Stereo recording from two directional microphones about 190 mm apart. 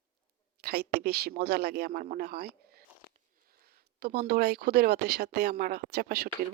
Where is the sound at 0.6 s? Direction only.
60° right (ahead or behind).